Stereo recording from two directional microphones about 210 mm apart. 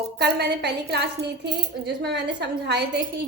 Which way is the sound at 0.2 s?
50° right (ahead or behind).